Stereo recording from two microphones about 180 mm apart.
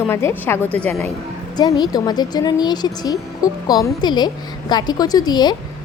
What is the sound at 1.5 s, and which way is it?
Speech, 20° left (ahead or behind).